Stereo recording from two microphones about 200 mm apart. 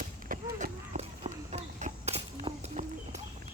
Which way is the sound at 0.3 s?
35° right (ahead or behind).